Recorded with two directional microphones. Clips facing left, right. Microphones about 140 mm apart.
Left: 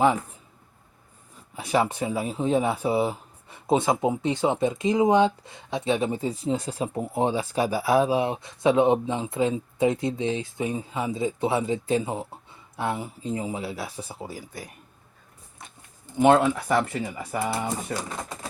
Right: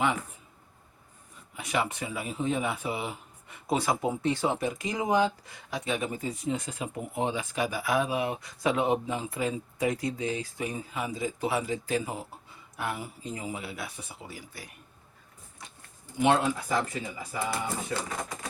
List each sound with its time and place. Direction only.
0.0 s speech: 35° left (ahead or behind)
1.5 s speech: 35° left (ahead or behind)
16.2 s speech: 60° left (ahead or behind)